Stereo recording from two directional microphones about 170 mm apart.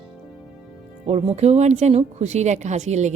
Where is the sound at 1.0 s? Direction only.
40° right (ahead or behind).